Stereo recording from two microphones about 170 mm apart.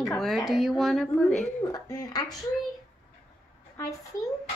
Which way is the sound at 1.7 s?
20° left (ahead or behind).